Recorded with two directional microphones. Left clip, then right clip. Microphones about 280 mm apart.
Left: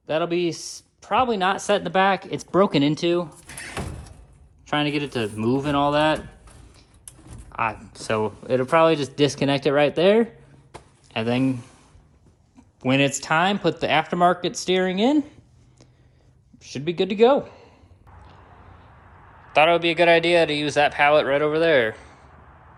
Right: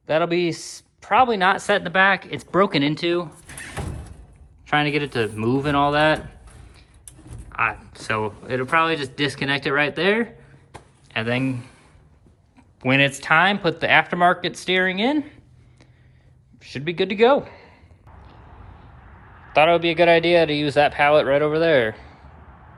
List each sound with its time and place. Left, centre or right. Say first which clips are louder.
0.0 s speech: right 3 dB; centre
4.7 s speech: right 3 dB; centre
7.5 s speech: right 3 dB; centre
12.8 s speech: right 2 dB; centre
16.6 s speech: right 1 dB; centre
19.5 s speech: right 1 dB; centre